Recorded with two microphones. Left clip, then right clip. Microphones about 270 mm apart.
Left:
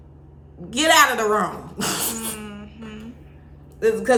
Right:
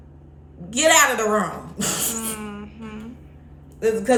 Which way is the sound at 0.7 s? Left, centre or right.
Centre.